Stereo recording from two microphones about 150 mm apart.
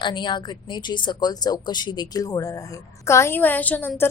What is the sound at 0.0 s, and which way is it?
A woman's voice, 30° left (ahead or behind).